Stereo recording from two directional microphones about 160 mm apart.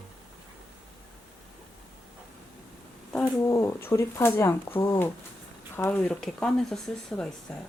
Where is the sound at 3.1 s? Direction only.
15° left (ahead or behind).